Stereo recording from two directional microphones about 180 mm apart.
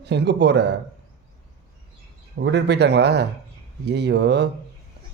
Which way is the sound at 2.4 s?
70° right (ahead or behind).